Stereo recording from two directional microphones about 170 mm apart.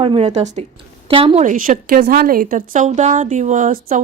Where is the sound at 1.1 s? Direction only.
30° right (ahead or behind).